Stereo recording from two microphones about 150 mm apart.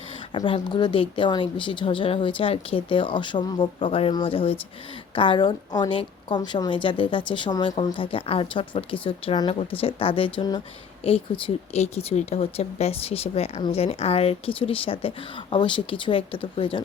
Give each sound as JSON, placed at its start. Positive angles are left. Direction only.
{"t": 0.3, "sound": "speech", "side_deg": 30}